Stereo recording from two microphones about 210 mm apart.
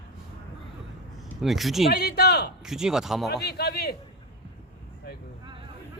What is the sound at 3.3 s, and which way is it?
Speech, 50° left (ahead or behind).